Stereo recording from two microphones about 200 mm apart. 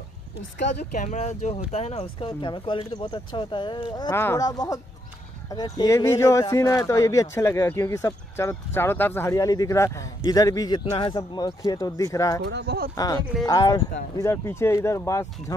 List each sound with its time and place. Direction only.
0.9 s speech: 35° left (ahead or behind); by 12.4 s 15° left (ahead or behind)
12.4 s speech: 55° right (ahead or behind)
12.9 s speech: 20° left (ahead or behind)